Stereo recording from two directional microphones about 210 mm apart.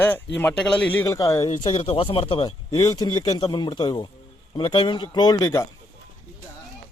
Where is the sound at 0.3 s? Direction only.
5° left (ahead or behind).